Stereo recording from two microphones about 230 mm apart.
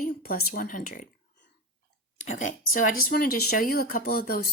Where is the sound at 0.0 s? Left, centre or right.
Left.